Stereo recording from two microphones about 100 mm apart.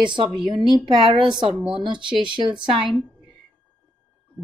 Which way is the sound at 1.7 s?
55° right (ahead or behind).